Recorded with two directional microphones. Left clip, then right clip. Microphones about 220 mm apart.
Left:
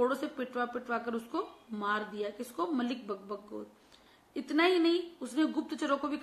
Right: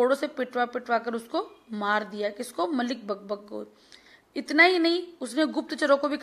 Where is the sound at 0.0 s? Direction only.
40° right (ahead or behind).